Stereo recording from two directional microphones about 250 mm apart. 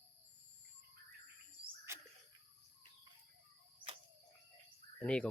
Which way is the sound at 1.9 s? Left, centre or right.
Centre.